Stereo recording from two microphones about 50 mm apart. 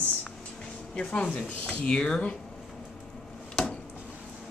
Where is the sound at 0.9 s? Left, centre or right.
Centre.